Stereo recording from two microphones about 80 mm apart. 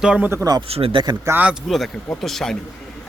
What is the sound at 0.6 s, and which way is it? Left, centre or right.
Speech, right.